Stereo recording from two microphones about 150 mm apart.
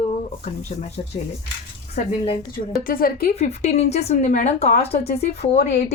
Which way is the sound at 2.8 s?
75° left (ahead or behind).